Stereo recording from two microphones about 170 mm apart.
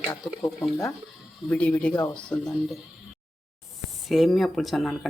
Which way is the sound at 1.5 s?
5° left (ahead or behind).